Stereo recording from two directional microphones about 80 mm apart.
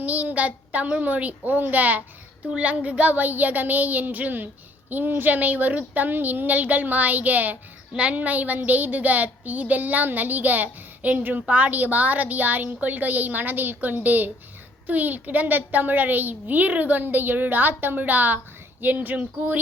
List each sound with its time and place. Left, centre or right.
0.0 s a child's voice: centre